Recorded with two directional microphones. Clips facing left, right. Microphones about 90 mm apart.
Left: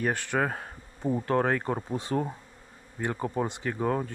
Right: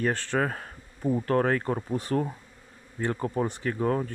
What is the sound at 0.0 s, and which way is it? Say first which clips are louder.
Speech: right 1 dB; 15° left (ahead or behind).